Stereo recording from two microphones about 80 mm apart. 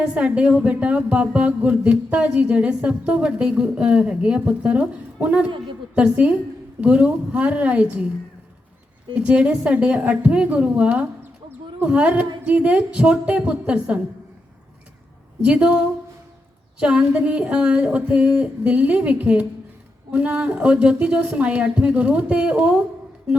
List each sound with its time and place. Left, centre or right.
0.0 s a woman's voice: centre
9.2 s a woman's voice: centre
15.4 s a woman's voice: centre